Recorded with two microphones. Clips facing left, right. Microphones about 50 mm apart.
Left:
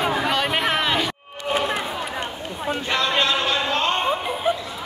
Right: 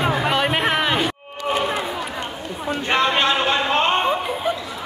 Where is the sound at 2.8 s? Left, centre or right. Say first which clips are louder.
Right 4 dB; right.